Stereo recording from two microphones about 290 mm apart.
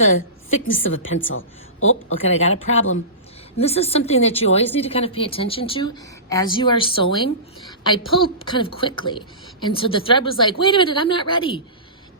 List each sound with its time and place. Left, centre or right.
0.6 s a woman's voice: left
3.6 s a woman's voice: left